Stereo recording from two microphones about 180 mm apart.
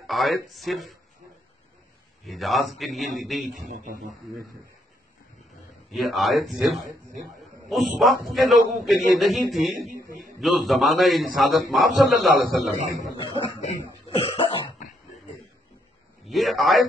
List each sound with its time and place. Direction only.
0.0 s speech: centre (ahead or behind)
2.2 s a man's voice: centre (ahead or behind)
3.7 s a man's voice: 45° right (ahead or behind)
5.9 s a man's voice: centre (ahead or behind)
13.2 s cough: 25° left (ahead or behind)
16.2 s a man's voice: centre (ahead or behind)